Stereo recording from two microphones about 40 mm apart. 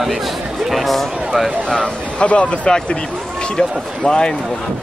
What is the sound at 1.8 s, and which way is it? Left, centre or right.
A man's voice, left.